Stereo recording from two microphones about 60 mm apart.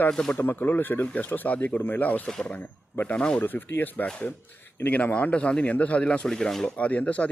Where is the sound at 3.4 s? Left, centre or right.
Left; by 6.7 s centre.